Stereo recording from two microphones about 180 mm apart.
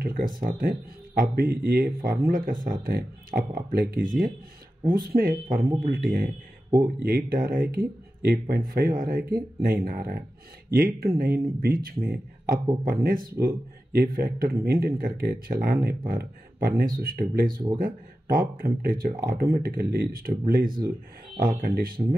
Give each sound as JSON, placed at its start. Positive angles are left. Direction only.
{"t": 0.0, "sound": "speech", "side_deg": -50}